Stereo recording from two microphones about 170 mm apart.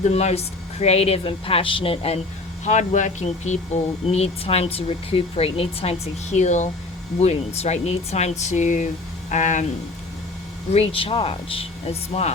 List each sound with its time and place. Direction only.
0.0 s speech: 40° left (ahead or behind)
2.6 s speech: 45° left (ahead or behind)
10.7 s speech: 35° left (ahead or behind)